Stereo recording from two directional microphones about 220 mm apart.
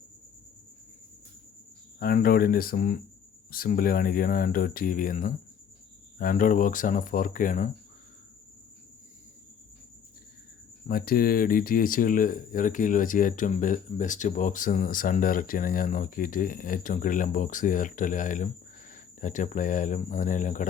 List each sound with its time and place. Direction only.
2.0 s speech: 40° left (ahead or behind)
10.8 s speech: 40° left (ahead or behind)